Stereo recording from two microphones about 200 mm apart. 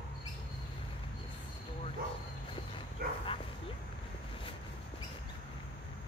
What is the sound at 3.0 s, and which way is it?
Dog, 50° right (ahead or behind).